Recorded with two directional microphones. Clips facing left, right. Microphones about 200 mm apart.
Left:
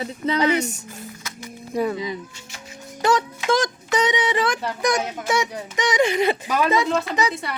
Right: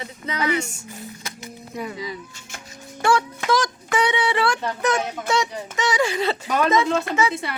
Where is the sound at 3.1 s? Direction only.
20° left (ahead or behind).